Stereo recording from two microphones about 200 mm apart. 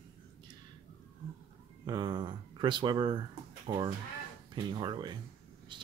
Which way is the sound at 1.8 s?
20° right (ahead or behind).